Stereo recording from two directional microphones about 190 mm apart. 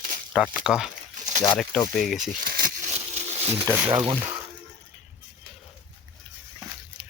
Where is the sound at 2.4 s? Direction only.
50° right (ahead or behind).